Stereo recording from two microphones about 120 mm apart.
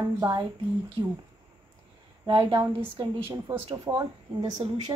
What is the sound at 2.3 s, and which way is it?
Speech, 50° right (ahead or behind).